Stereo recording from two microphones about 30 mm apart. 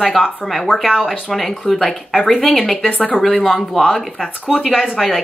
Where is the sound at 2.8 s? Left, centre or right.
Left.